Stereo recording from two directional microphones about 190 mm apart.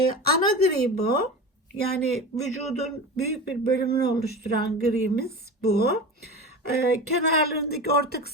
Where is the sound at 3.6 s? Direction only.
55° left (ahead or behind).